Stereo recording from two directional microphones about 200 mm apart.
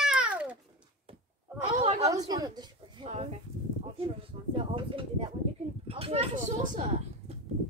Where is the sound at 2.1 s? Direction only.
20° right (ahead or behind); by 7.4 s 35° right (ahead or behind).